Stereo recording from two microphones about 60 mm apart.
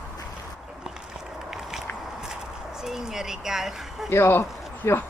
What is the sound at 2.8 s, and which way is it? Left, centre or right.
Speech, centre.